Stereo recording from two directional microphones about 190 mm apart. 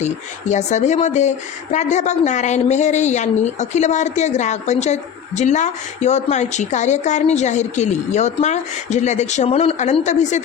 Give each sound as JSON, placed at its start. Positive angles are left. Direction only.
{"t": 0.0, "sound": "speech", "side_deg": 40}